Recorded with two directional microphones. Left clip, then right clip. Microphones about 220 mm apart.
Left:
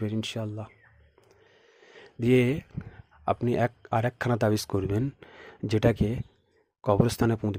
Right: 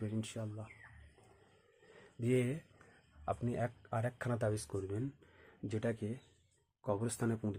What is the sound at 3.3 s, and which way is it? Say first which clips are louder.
Speech: left 12 dB; 40° left (ahead or behind).